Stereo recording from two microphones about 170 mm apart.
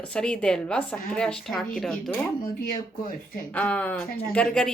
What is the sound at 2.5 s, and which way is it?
Speech, 55° left (ahead or behind).